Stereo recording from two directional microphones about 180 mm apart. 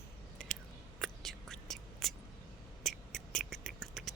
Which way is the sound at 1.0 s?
Centre (ahead or behind).